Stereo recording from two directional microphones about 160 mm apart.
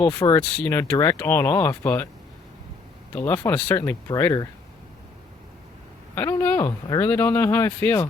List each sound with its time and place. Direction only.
0.2 s speech: 20° left (ahead or behind)
3.2 s speech: 15° left (ahead or behind)
6.1 s speech: 15° left (ahead or behind)